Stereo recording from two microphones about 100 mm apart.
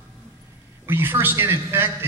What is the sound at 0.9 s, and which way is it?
A man's voice, 25° right (ahead or behind).